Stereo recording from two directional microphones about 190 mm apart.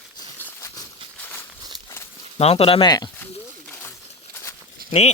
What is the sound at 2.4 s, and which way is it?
Speech, 30° left (ahead or behind).